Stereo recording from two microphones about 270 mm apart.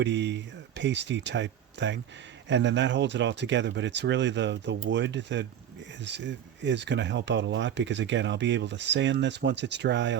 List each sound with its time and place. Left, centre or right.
0.0 s speech: right